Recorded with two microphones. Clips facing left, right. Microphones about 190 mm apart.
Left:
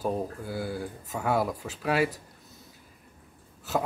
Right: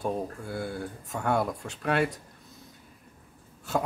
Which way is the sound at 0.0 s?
5° left (ahead or behind).